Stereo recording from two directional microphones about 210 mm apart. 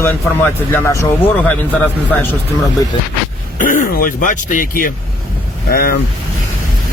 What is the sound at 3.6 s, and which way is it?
Speech, 40° left (ahead or behind).